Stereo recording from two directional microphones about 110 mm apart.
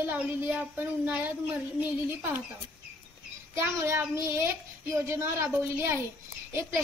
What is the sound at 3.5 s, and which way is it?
A child's voice, 25° right (ahead or behind).